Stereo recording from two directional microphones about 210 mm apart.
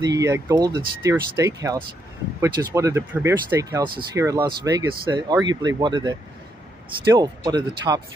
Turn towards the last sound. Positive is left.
turn(degrees=-20)  # may be behind; listen again after turning